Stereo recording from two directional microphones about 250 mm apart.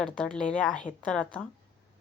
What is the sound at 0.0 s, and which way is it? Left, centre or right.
A woman's voice, centre.